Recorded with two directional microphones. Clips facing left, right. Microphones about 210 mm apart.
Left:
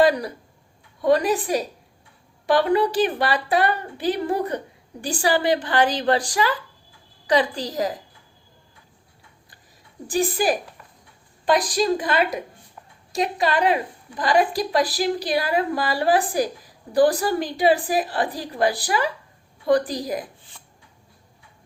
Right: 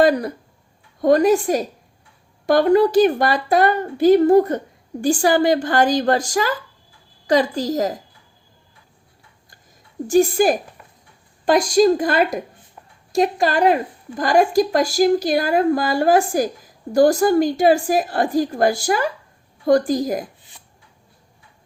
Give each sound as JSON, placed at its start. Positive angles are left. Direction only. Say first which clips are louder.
{"t": 0.0, "sound": "a woman's voice", "louder": "right 3 dB", "side_deg": -50}
{"t": 10.1, "sound": "a woman's voice", "louder": "right 6 dB", "side_deg": -45}
{"t": 11.7, "sound": "a woman's voice", "louder": "right 7 dB", "side_deg": -45}